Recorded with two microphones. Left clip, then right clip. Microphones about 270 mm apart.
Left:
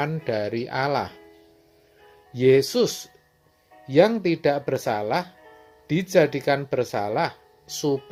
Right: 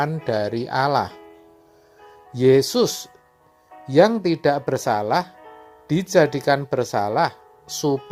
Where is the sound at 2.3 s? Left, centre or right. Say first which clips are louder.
Right 2 dB; right.